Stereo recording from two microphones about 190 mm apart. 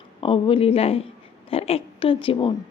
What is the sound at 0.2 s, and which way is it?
A woman's voice, 30° left (ahead or behind).